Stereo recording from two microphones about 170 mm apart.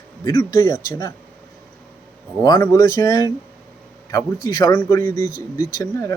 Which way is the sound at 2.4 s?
20° left (ahead or behind).